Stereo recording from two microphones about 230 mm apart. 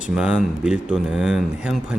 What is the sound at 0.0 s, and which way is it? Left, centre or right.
A man's voice, centre.